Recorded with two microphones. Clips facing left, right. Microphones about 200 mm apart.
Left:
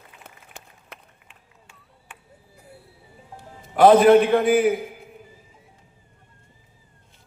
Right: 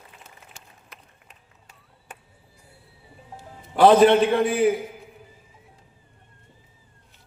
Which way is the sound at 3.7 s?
30° right (ahead or behind).